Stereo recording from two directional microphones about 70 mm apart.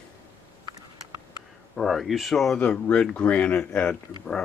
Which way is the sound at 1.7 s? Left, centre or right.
Centre.